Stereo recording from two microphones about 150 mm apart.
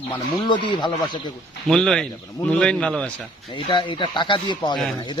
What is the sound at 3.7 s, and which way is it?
Speech, 30° left (ahead or behind).